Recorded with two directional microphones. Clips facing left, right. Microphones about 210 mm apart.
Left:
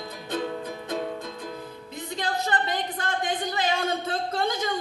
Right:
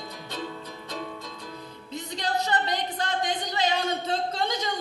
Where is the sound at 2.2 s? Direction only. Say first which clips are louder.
Even; 50° left (ahead or behind).